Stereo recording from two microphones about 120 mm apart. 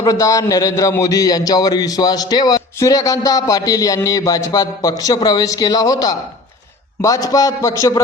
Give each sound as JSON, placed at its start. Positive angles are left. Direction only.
{"t": 0.0, "sound": "a man's voice", "side_deg": 30}